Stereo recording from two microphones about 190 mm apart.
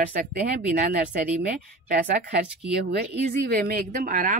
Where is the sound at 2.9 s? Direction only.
60° right (ahead or behind).